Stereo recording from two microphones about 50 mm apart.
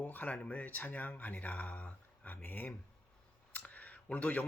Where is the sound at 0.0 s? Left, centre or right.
Left.